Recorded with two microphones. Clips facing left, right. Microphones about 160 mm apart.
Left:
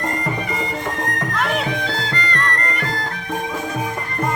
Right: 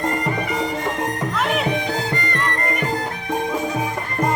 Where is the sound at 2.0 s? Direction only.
15° right (ahead or behind).